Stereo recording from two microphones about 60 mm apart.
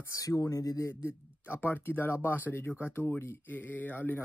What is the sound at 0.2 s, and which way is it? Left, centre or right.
Speech, left.